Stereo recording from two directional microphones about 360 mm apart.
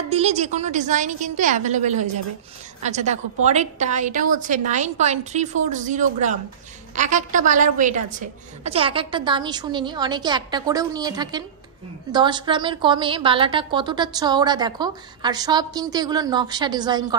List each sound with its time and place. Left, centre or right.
0.1 s a woman's voice: centre